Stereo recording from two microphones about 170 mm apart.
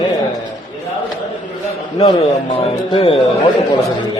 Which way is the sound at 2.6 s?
35° left (ahead or behind).